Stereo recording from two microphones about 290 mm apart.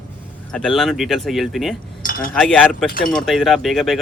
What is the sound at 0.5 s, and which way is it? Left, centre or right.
Speech, centre.